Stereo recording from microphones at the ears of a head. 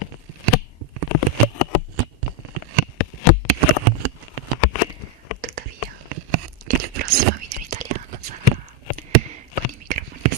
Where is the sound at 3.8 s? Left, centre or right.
Right.